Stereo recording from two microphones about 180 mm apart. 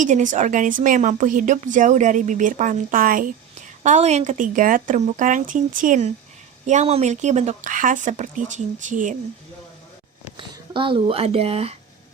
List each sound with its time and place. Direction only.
0.0 s speech: 45° right (ahead or behind)
10.3 s speech: 25° right (ahead or behind)